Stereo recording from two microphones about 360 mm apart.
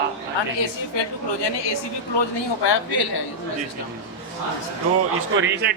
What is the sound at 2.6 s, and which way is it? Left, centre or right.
Speech, left.